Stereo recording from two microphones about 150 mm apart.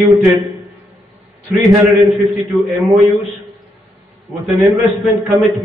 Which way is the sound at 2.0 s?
Centre (ahead or behind).